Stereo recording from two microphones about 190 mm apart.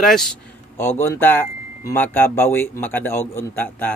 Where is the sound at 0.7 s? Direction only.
10° left (ahead or behind).